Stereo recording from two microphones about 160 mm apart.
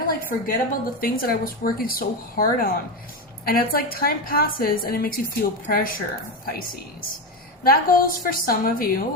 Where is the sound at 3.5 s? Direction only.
70° left (ahead or behind).